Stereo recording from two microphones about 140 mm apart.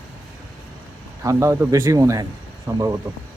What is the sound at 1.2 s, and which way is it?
Speech, 20° right (ahead or behind).